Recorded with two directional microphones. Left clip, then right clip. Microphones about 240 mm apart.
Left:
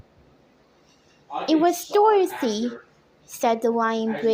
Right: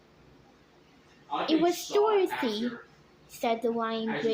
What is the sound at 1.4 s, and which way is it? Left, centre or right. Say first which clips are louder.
A woman's voice: left 7 dB; left.